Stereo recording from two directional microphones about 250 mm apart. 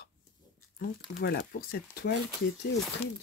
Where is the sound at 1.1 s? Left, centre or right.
Left.